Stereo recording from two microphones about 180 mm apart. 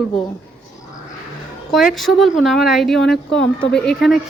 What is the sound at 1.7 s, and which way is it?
Speech, centre (ahead or behind).